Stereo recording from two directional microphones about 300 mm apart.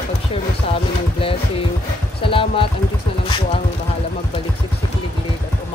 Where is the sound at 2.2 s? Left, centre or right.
Centre.